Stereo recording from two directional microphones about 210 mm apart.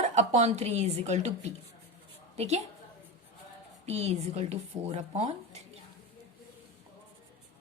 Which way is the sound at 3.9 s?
30° right (ahead or behind).